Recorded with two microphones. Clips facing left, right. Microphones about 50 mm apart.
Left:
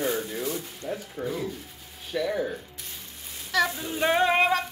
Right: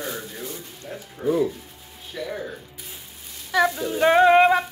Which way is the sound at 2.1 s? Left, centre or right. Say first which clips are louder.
Left 4 dB; left.